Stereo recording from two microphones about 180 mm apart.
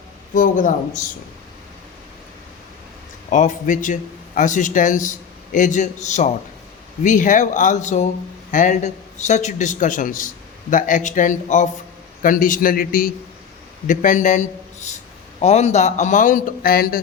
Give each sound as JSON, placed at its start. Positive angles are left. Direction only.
{"t": 0.3, "sound": "speech", "side_deg": 50}
{"t": 3.2, "sound": "a man's voice", "side_deg": 45}